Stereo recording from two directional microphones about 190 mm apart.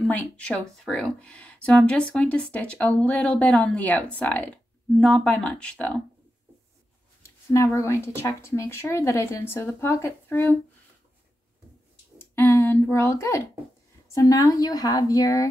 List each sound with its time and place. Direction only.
0.0 s speech: 5° left (ahead or behind)
7.2 s speech: 15° left (ahead or behind)
12.2 s a woman's voice: 10° left (ahead or behind)